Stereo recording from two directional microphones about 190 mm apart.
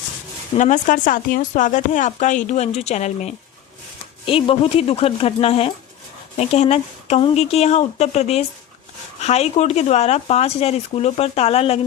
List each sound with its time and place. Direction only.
0.5 s speech: 40° left (ahead or behind)